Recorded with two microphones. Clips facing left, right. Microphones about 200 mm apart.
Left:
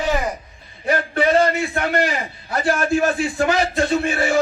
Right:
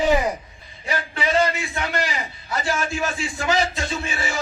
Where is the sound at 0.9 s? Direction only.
55° left (ahead or behind).